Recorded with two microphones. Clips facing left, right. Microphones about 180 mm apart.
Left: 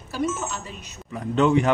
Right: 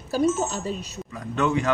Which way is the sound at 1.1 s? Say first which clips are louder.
Left 5 dB; 20° left (ahead or behind).